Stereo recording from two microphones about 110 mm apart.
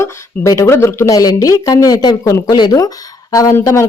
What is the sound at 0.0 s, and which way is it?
Speech, 30° left (ahead or behind).